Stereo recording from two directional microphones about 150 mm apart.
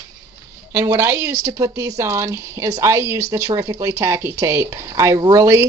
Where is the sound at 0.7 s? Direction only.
20° right (ahead or behind).